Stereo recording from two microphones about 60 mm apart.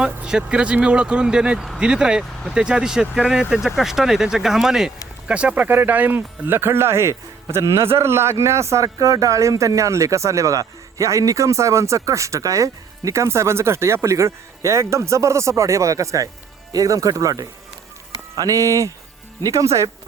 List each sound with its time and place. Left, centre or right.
0.0 s speech: centre
5.3 s speech: right
5.6 s speech: right